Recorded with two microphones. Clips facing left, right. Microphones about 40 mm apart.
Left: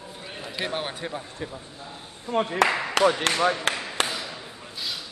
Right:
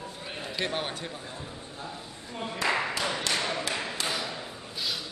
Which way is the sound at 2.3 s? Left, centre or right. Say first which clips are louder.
Left 7 dB; left.